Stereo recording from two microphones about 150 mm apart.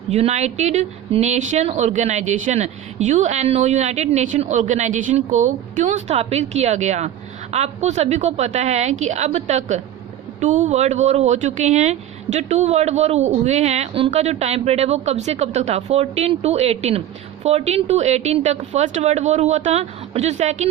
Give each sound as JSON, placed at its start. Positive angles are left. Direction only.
{"t": 0.1, "sound": "speech", "side_deg": -45}